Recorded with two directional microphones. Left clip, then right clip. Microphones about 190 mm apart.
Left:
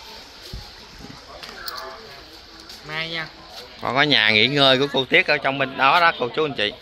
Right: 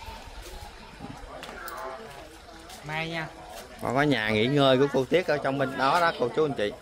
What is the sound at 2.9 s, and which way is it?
Speech, 80° right.